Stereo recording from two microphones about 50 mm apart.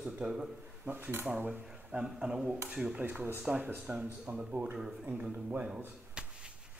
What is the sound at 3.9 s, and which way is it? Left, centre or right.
Speech, right.